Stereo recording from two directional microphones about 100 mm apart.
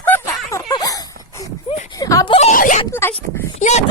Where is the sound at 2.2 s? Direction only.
85° left.